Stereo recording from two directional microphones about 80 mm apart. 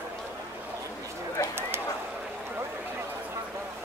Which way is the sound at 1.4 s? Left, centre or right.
Left.